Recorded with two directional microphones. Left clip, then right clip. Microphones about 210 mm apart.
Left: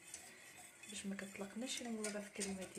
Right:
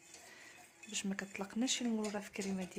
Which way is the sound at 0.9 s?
55° right (ahead or behind).